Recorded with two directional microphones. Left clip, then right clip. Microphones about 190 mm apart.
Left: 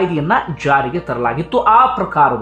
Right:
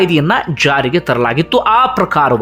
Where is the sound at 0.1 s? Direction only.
20° right (ahead or behind).